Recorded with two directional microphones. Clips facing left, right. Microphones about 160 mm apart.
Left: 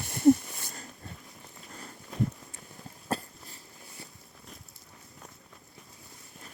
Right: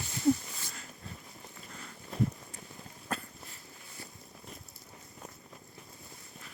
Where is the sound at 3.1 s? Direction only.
30° left (ahead or behind).